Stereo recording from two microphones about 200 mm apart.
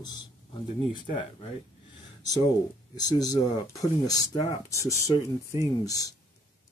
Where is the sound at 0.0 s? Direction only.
20° left (ahead or behind).